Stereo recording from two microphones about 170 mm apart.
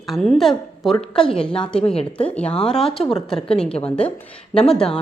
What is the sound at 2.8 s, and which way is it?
Speech, 35° left (ahead or behind).